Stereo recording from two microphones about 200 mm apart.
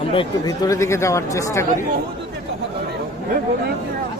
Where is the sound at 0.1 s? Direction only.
20° left (ahead or behind).